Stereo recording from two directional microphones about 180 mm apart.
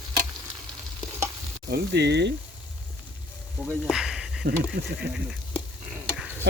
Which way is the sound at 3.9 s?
Centre (ahead or behind).